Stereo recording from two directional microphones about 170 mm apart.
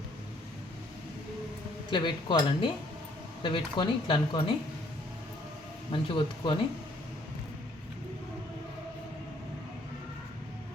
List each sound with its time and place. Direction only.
1.9 s speech: 25° left (ahead or behind)
5.9 s speech: 30° left (ahead or behind)